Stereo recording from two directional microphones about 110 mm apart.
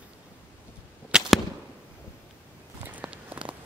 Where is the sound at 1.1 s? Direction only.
5° right (ahead or behind).